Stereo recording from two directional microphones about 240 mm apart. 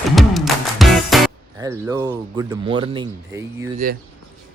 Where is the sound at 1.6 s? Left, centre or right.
Centre.